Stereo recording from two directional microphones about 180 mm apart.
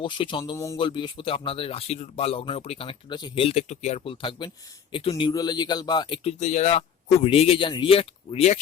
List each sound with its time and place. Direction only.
0.0 s speech: 25° left (ahead or behind)
0.8 s speech: 25° left (ahead or behind)
6.4 s speech: 40° left (ahead or behind)